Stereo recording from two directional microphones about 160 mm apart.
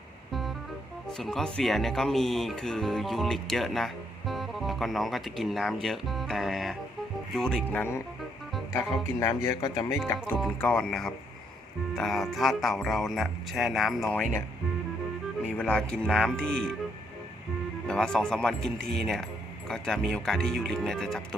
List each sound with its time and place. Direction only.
1.0 s speech: 5° left (ahead or behind)
9.2 s speech: 15° left (ahead or behind)
10.2 s speech: 5° left (ahead or behind)
15.4 s speech: 10° left (ahead or behind)
17.8 s speech: 5° left (ahead or behind)